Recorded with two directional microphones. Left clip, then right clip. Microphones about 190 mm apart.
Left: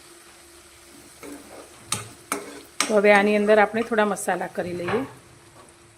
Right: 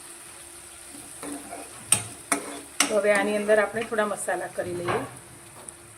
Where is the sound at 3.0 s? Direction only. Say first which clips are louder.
Left 7 dB; 55° left (ahead or behind).